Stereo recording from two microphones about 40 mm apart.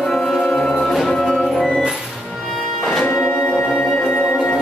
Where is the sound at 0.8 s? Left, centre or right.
Centre.